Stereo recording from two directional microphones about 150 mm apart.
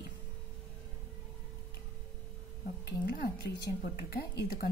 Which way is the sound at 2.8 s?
80° left.